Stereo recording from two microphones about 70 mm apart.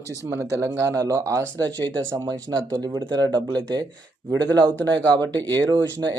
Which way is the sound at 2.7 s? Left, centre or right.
Right.